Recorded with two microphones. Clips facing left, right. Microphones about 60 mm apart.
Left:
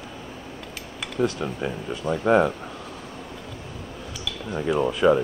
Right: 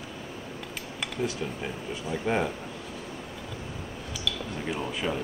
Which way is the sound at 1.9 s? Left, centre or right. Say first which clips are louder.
Left 9 dB; left.